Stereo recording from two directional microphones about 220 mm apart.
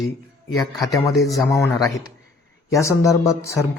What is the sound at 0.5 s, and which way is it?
A man's voice, 15° left (ahead or behind).